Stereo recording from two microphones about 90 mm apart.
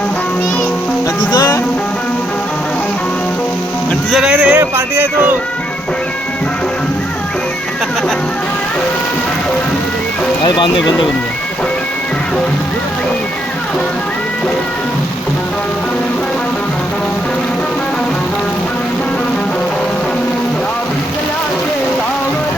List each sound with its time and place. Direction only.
1.3 s music: 45° left (ahead or behind)
4.1 s speech: 5° right (ahead or behind); by 5.4 s 20° right (ahead or behind)
10.4 s speech: 60° left (ahead or behind)